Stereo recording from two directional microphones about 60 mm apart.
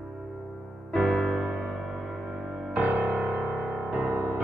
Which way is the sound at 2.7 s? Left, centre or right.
Right.